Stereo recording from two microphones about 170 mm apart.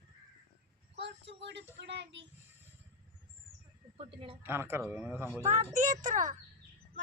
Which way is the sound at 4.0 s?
35° right (ahead or behind).